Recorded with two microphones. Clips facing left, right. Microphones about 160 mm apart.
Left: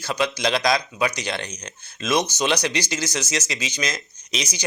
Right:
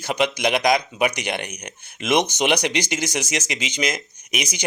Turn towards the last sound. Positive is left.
turn(degrees=-15)  # may be behind; listen again after turning